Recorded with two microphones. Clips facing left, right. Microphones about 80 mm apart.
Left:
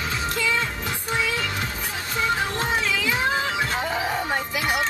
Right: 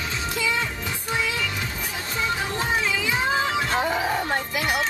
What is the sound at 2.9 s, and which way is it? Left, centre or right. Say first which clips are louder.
Music: left 1 dB; centre.